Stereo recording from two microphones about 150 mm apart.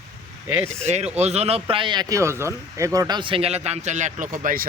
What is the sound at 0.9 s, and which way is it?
Speech, 50° right (ahead or behind).